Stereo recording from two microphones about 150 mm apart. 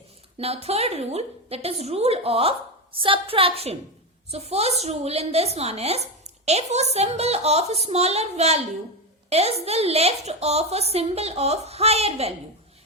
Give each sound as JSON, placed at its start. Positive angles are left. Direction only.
{"t": 0.3, "sound": "a woman's voice", "side_deg": -45}